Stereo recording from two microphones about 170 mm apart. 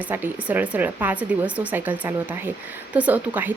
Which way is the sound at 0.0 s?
10° right (ahead or behind).